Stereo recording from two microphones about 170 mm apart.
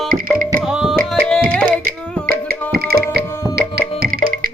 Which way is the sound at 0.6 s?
5° right (ahead or behind).